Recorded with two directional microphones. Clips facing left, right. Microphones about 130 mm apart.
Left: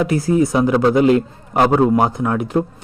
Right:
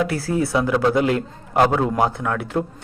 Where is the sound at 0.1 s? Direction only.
20° left (ahead or behind).